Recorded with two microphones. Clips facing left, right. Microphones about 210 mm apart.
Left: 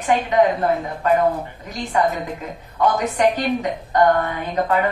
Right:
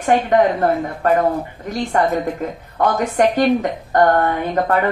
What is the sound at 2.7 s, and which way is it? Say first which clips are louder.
A woman's voice: right 2 dB; 50° right (ahead or behind).